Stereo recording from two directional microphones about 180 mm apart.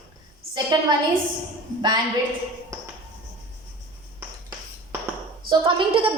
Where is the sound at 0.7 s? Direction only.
25° right (ahead or behind).